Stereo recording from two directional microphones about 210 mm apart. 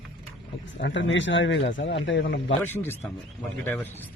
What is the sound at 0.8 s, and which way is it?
A man's voice, 60° left (ahead or behind).